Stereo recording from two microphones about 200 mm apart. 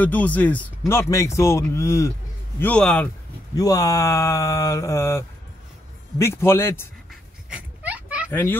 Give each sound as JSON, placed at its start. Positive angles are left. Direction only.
{"t": 0.0, "sound": "speech", "side_deg": 10}
{"t": 3.5, "sound": "speech", "side_deg": 15}
{"t": 7.1, "sound": "a sound", "side_deg": -5}
{"t": 8.3, "sound": "speech", "side_deg": 10}